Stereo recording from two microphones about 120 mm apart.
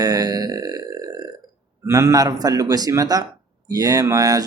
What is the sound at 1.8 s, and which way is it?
Speech, 25° right (ahead or behind).